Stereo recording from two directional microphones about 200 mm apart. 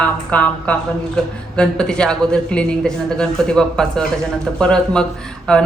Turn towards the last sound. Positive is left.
turn(degrees=5)  # may be behind; listen again after turning